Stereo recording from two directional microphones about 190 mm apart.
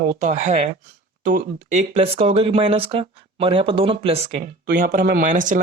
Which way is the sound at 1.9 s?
30° right (ahead or behind).